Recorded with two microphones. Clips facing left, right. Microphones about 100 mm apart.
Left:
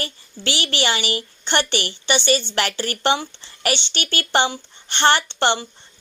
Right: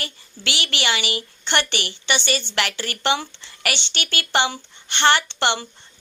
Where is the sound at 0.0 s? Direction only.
35° left (ahead or behind).